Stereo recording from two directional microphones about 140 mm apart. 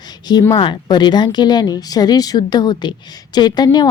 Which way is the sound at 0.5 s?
35° left (ahead or behind).